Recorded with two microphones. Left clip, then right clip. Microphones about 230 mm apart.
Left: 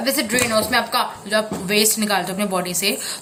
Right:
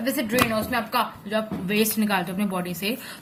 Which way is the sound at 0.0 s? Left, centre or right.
Right.